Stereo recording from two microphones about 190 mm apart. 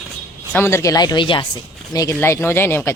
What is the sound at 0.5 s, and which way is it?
Speech, 15° left (ahead or behind).